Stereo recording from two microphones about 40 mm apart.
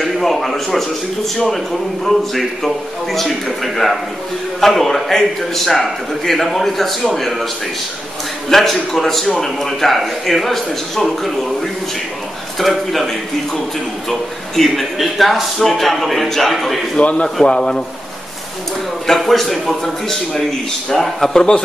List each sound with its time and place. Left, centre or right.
0.0 s speech: centre
2.0 s a man's voice: centre
8.5 s a man's voice: centre
17.0 s a man's voice: left
17.5 s speech: centre
19.0 s speech: centre